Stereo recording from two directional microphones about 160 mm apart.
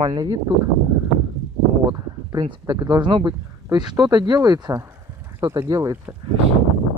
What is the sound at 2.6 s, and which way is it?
Speech, 20° right (ahead or behind).